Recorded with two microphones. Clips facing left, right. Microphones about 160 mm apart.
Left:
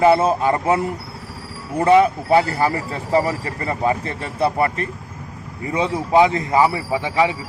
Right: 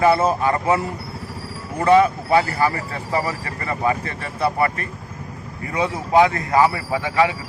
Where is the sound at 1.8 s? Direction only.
20° left (ahead or behind).